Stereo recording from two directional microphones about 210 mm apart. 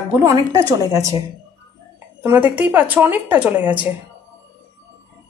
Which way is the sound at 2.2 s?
10° right (ahead or behind).